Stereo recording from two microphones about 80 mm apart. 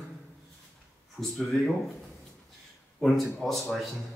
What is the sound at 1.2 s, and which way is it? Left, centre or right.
Speech, centre.